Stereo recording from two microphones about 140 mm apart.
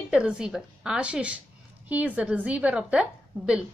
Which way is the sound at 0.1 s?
5° right (ahead or behind).